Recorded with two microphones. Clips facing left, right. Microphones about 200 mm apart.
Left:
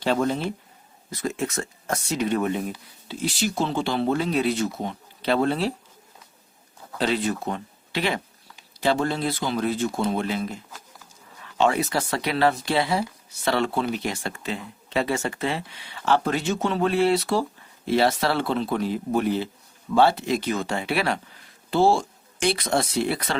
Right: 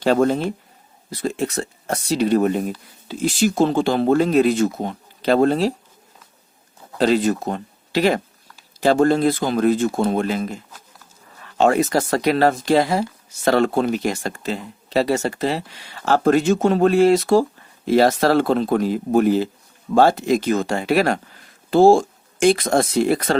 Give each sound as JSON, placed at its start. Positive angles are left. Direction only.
{"t": 0.0, "sound": "speech", "side_deg": -45}
{"t": 1.1, "sound": "speech", "side_deg": -30}
{"t": 7.0, "sound": "speech", "side_deg": -40}
{"t": 11.5, "sound": "speech", "side_deg": -45}